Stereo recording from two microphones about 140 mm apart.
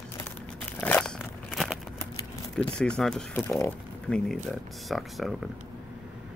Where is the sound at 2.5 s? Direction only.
5° left (ahead or behind).